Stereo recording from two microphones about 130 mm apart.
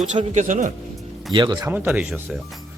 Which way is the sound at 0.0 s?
65° right (ahead or behind).